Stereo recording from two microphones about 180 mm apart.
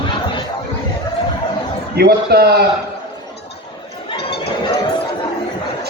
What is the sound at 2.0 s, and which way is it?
Speech, 60° right (ahead or behind).